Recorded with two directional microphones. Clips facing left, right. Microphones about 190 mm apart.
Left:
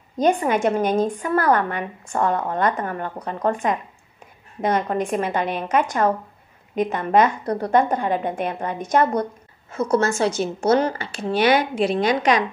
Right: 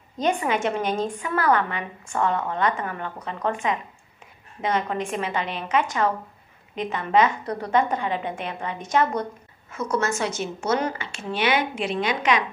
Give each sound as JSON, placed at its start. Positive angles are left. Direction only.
{"t": 0.2, "sound": "a woman's voice", "side_deg": 40}
{"t": 9.7, "sound": "a woman's voice", "side_deg": 30}